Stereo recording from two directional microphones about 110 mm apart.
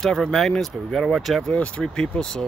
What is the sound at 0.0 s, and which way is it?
Speech, 5° left (ahead or behind).